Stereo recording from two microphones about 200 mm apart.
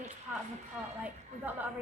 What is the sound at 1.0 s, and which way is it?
Speech, 10° right (ahead or behind).